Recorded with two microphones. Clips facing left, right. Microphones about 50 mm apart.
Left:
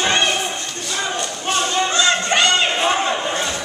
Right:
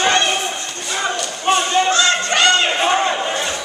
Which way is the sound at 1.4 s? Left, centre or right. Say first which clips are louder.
Right 5 dB; centre.